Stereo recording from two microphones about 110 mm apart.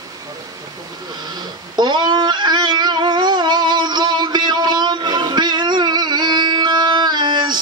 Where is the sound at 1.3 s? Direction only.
40° right (ahead or behind).